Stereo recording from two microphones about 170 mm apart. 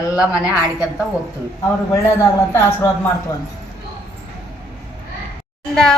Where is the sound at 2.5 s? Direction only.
15° left (ahead or behind).